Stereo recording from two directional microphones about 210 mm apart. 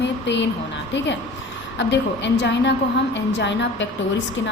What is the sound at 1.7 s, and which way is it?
A woman's voice, 55° left (ahead or behind).